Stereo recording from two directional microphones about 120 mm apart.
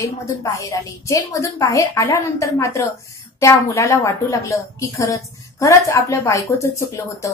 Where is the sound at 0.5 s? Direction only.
25° left (ahead or behind).